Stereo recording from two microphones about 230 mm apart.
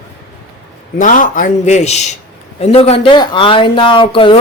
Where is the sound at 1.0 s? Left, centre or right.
Left.